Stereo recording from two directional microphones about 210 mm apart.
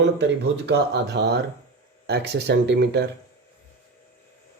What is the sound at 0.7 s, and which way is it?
Speech, 55° right (ahead or behind).